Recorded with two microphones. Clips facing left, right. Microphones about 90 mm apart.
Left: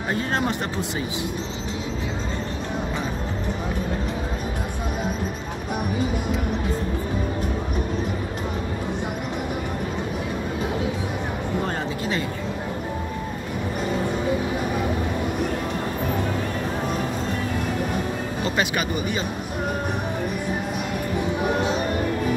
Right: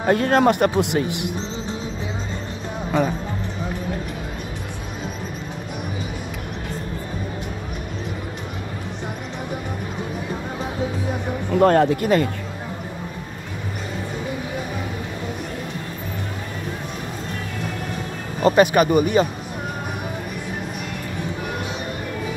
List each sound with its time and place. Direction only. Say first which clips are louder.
0.0 s speech: right 8 dB; 55° right (ahead or behind)
11.6 s speech: right 11 dB; 60° right (ahead or behind)
18.4 s speech: right 11 dB; 45° right (ahead or behind)